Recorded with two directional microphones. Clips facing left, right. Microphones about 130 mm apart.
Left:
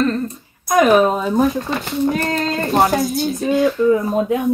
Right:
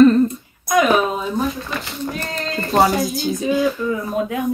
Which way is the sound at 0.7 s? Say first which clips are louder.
Left 3 dB; 45° left (ahead or behind).